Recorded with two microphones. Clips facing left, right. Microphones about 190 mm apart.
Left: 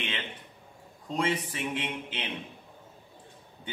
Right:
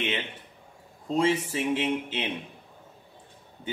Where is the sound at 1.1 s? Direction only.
25° right (ahead or behind).